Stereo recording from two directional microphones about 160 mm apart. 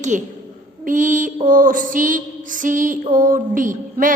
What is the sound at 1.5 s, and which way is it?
Female singing, 55° right (ahead or behind).